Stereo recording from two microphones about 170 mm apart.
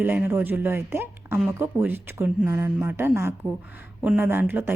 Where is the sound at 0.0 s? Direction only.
10° right (ahead or behind).